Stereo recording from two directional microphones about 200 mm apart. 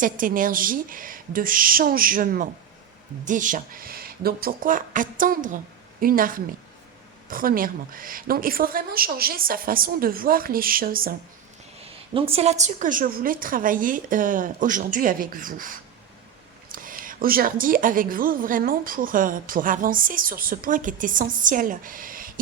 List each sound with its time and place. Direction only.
0.0 s a woman's voice: 45° right (ahead or behind)
12.1 s a woman's voice: 30° right (ahead or behind); by 22.3 s 45° right (ahead or behind)